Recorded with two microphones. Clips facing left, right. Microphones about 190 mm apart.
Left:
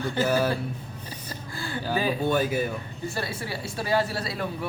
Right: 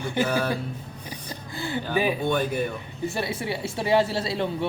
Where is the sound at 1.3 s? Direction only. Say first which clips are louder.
Right 4 dB; 20° right (ahead or behind).